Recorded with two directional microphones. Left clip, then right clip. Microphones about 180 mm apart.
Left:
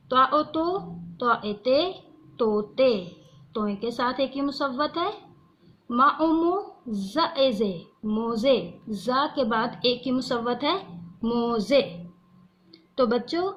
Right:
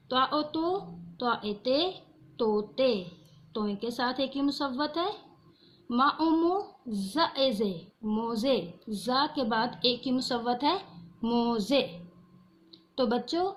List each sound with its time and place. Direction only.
0.1 s a woman's voice: 45° right (ahead or behind)
13.0 s a woman's voice: 45° right (ahead or behind)